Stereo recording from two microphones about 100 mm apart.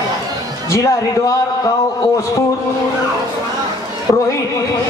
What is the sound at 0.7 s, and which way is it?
Speech, 30° left (ahead or behind).